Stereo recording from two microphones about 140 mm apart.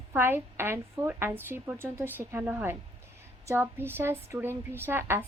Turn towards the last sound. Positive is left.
turn(degrees=-15)  # may be behind; listen again after turning